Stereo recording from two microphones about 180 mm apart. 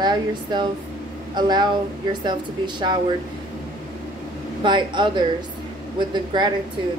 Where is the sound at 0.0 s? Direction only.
25° right (ahead or behind).